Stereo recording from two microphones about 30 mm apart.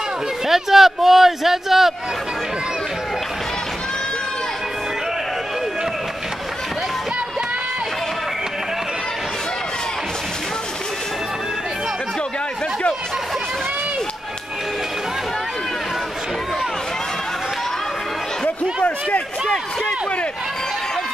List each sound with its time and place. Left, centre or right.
0.5 s speech: centre